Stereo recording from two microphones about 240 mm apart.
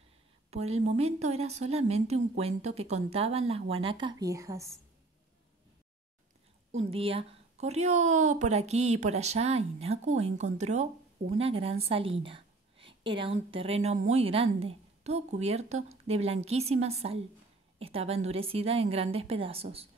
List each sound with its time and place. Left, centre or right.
0.5 s a woman's voice: right
6.8 s a woman's voice: right